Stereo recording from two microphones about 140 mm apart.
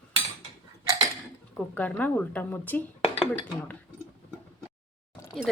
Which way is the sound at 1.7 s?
10° left (ahead or behind).